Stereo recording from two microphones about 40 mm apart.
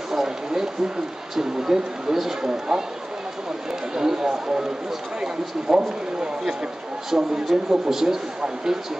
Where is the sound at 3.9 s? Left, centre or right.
Centre.